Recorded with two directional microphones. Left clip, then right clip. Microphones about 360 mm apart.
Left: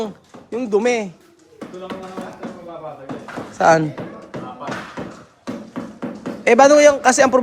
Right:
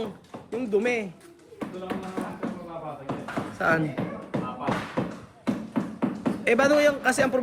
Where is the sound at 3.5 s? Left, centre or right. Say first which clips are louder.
Left 11 dB; centre.